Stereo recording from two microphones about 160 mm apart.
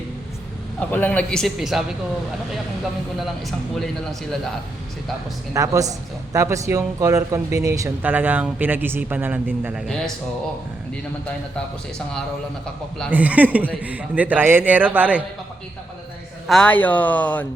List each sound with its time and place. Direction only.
0.8 s a man's voice: 10° left (ahead or behind)
5.5 s speech: 20° right (ahead or behind)
13.1 s speech: 10° right (ahead or behind)
16.5 s speech: 5° left (ahead or behind)